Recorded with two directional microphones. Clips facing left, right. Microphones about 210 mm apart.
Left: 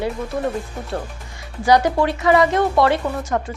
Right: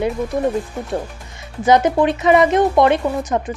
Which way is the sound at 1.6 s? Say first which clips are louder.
Right 2 dB; 20° right (ahead or behind).